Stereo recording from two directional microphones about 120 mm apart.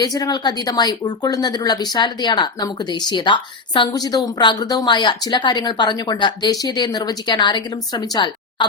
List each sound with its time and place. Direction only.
0.0 s speech: 30° left (ahead or behind)